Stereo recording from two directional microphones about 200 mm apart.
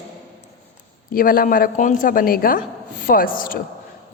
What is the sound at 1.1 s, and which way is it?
A woman's voice, 45° left (ahead or behind).